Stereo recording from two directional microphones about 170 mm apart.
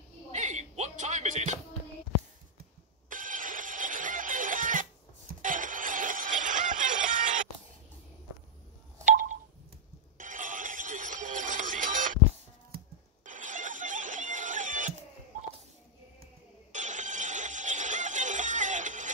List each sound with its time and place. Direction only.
0.3 s music: 45° right (ahead or behind)
3.1 s music: 50° right (ahead or behind)
10.1 s music: 50° right (ahead or behind)
16.7 s music: 45° right (ahead or behind)